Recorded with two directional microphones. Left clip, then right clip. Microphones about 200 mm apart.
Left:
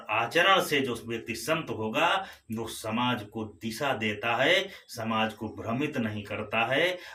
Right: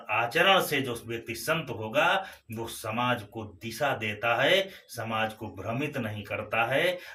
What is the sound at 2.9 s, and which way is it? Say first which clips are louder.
Speech: right 1 dB; 10° left (ahead or behind).